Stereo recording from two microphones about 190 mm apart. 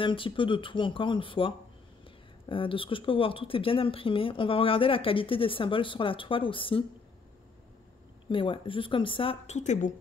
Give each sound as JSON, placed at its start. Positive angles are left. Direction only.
{"t": 0.0, "sound": "speech", "side_deg": 25}
{"t": 2.5, "sound": "speech", "side_deg": 25}
{"t": 8.3, "sound": "speech", "side_deg": 25}